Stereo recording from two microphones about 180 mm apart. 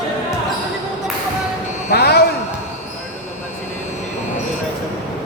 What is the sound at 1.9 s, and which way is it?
Speech, 60° left (ahead or behind).